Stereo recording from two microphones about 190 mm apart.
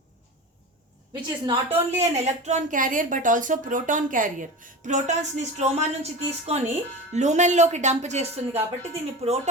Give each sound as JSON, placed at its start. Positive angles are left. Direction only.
{"t": 1.1, "sound": "a woman's voice", "side_deg": -25}
{"t": 2.0, "sound": "a woman's voice", "side_deg": -35}